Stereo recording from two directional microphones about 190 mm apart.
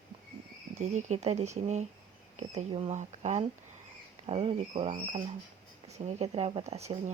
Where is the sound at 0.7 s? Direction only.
40° right (ahead or behind).